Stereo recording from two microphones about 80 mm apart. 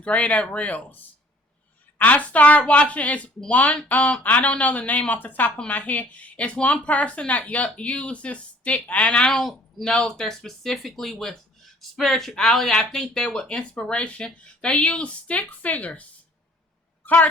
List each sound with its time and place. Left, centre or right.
0.0 s a woman's voice: centre
2.0 s a woman's voice: centre